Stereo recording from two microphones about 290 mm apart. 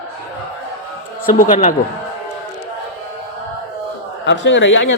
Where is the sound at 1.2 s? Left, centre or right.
Left.